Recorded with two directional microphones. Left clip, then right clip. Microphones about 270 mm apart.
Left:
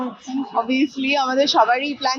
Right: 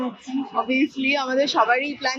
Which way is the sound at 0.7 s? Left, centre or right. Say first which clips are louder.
Right 1 dB; left.